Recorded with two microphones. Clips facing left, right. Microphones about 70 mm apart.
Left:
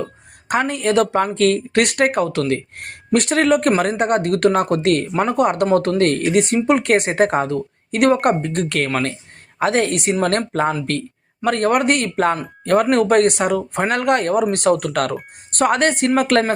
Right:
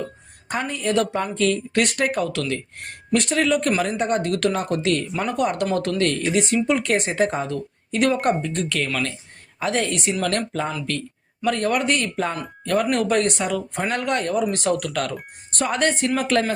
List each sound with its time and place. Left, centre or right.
0.4 s speech: left
9.6 s speech: left
10.2 s speech: left